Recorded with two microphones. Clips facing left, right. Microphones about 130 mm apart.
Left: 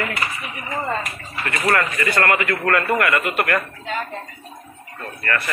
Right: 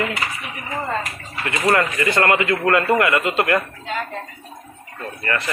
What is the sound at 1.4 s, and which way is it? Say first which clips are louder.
Speech: right 2 dB; 20° right (ahead or behind).